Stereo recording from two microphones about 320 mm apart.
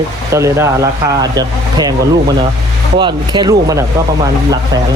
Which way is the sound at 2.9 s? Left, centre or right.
Centre.